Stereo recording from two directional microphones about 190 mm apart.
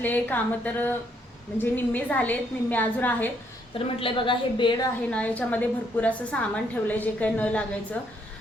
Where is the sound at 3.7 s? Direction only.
25° left (ahead or behind).